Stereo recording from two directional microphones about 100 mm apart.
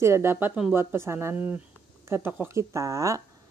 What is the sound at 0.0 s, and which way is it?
Speech, 25° right (ahead or behind).